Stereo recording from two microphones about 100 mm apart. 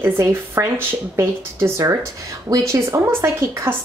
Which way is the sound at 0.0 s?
25° right (ahead or behind).